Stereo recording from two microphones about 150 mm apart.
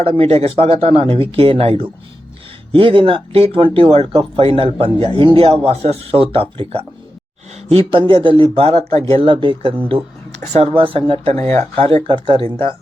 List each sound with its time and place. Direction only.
0.0 s speech: 40° right (ahead or behind)
11.3 s speech: 20° left (ahead or behind)
11.8 s speech: 35° right (ahead or behind)